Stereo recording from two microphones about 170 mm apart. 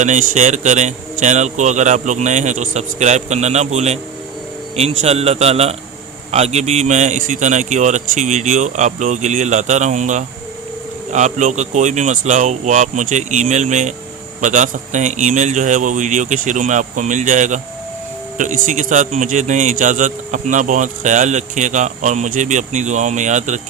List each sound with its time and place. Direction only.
0.0 s a man's voice: 45° right (ahead or behind)